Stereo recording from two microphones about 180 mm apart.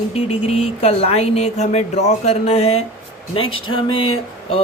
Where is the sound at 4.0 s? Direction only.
30° left (ahead or behind).